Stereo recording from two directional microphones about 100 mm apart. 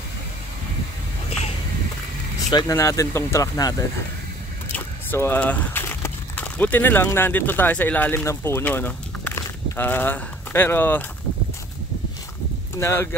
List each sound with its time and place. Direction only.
2.7 s speech: 30° left (ahead or behind)
4.7 s speech: 20° left (ahead or behind)
12.7 s speech: 25° left (ahead or behind)